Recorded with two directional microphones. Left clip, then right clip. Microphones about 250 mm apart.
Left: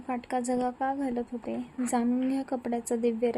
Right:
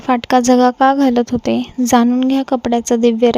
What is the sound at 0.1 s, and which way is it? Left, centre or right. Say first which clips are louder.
A woman's voice: right 18 dB; right.